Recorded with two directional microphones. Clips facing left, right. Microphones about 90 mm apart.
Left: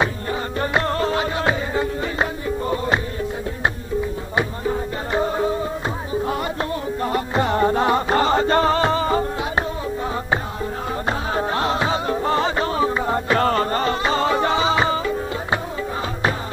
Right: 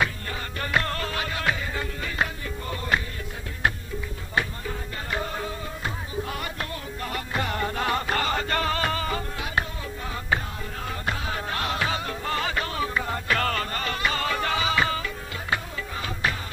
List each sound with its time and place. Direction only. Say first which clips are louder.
0.0 s music: left 6 dB; 25° left (ahead or behind)
4.4 s music: left 6 dB; 25° left (ahead or behind)